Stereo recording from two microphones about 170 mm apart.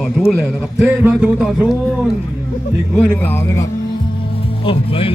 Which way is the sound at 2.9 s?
10° left (ahead or behind).